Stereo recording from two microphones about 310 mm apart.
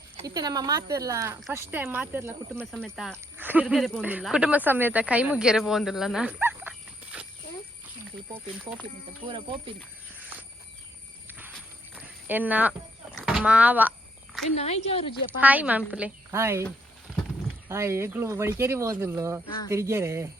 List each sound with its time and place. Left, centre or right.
0.2 s speech: centre
8.3 s speech: centre
9.2 s speech: centre
11.3 s a sound: centre
14.5 s speech: centre
15.4 s speech: centre
17.7 s speech: centre